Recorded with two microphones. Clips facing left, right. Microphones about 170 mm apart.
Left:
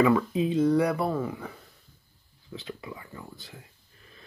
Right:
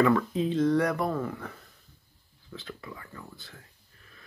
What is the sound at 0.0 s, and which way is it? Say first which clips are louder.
Speech: left 1 dB; 5° left (ahead or behind).